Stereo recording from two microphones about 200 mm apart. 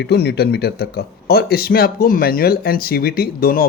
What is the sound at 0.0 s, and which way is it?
Speech, 55° left (ahead or behind).